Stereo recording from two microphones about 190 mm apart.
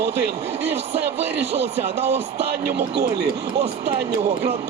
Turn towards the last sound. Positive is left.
turn(degrees=-60)  # may be behind; listen again after turning